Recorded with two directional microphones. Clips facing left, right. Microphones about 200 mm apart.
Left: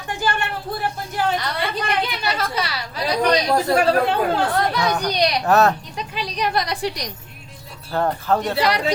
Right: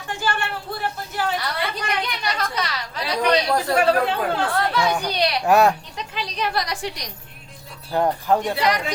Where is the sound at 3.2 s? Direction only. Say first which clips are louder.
Even; 40° left (ahead or behind).